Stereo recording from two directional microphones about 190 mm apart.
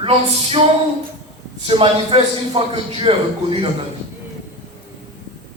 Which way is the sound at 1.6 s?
30° right (ahead or behind).